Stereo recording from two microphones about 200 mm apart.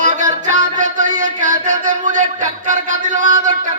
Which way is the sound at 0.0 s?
40° right (ahead or behind).